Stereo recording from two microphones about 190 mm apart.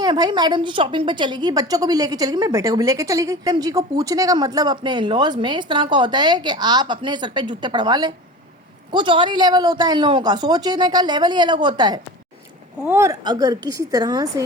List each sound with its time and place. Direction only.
0.0 s a woman's voice: 20° right (ahead or behind)